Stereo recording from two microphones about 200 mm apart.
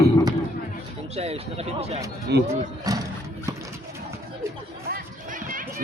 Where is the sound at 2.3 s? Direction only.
55° right (ahead or behind).